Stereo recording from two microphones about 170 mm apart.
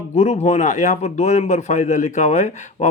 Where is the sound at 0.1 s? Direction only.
40° left (ahead or behind).